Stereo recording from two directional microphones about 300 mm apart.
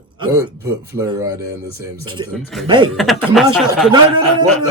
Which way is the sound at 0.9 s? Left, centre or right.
Centre.